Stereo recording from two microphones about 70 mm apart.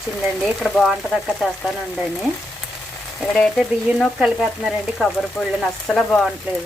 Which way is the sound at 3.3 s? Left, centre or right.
Centre.